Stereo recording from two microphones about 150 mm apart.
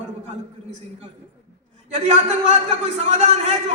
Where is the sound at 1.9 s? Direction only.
50° right (ahead or behind).